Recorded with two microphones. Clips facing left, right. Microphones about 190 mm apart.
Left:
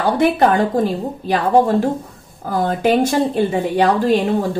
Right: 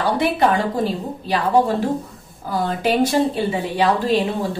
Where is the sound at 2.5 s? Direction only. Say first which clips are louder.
Left 4 dB; 50° left (ahead or behind).